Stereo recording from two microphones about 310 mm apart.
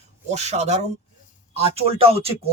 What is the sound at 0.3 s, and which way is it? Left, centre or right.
Speech, right.